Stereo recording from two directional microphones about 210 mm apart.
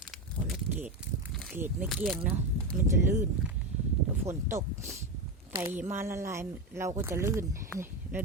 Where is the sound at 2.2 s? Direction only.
40° right (ahead or behind).